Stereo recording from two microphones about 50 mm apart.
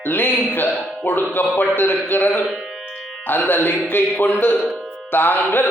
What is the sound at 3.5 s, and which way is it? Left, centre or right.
A man's voice, left.